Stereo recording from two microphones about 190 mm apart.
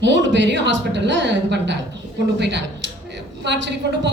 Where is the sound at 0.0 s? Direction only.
70° right (ahead or behind).